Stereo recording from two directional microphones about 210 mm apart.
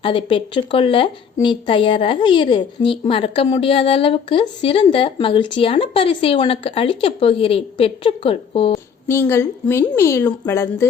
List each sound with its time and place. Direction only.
0.0 s a woman's voice: 25° left (ahead or behind)
9.0 s a woman's voice: 10° left (ahead or behind)